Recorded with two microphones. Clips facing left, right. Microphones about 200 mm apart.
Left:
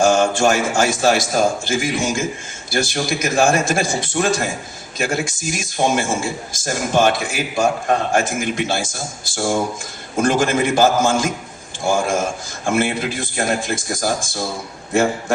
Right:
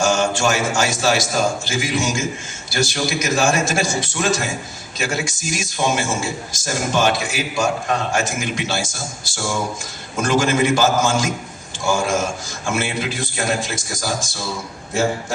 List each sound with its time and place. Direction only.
0.0 s a man's voice: 55° left (ahead or behind)